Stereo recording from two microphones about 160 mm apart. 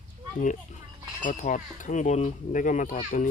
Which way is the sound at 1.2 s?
50° left (ahead or behind).